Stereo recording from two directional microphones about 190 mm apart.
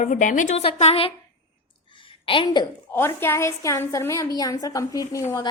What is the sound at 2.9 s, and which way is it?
A woman's voice, 10° left (ahead or behind).